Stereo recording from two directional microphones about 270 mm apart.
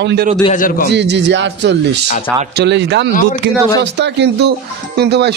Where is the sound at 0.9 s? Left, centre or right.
Right.